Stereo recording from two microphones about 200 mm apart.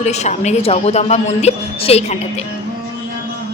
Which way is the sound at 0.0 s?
35° left (ahead or behind).